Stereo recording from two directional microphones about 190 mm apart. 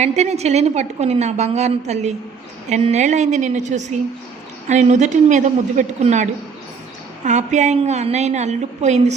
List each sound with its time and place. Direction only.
0.0 s a woman's voice: 35° right (ahead or behind)
7.3 s a woman's voice: 40° right (ahead or behind)